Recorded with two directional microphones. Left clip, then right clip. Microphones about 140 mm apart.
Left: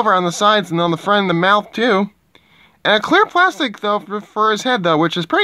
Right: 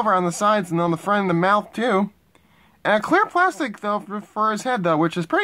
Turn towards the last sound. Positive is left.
turn(degrees=30)  # may be behind; listen again after turning